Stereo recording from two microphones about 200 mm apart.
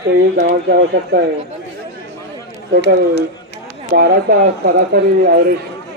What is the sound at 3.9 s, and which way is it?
Speech, 45° right (ahead or behind).